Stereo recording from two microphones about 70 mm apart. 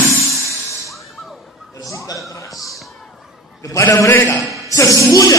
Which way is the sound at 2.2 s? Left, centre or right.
Left.